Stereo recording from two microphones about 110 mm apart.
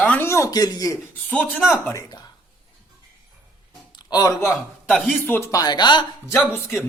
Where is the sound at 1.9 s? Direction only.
35° left (ahead or behind).